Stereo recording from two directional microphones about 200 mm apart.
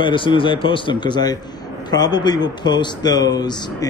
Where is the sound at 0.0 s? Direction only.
25° left (ahead or behind).